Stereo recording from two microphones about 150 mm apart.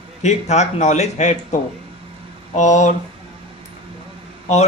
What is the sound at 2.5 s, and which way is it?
Speech, 55° left (ahead or behind).